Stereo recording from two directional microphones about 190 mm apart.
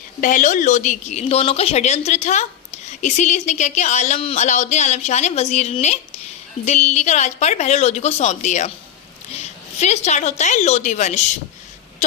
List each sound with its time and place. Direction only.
0.2 s a woman's voice: 40° left (ahead or behind)